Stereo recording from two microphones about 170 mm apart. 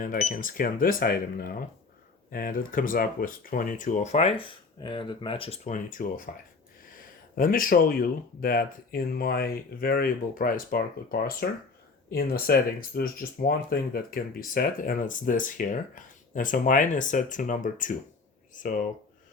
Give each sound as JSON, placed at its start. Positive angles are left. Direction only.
{"t": 0.0, "sound": "speech", "side_deg": 50}
{"t": 7.3, "sound": "speech", "side_deg": 55}